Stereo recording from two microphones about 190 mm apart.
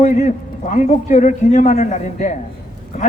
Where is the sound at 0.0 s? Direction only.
40° left (ahead or behind).